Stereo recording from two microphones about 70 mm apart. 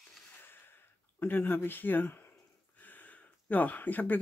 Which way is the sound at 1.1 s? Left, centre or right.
Left.